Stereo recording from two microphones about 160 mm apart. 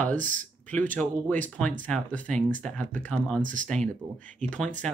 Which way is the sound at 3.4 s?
55° right (ahead or behind).